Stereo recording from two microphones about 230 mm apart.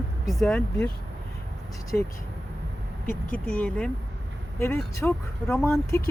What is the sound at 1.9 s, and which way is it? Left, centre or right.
Speech, centre.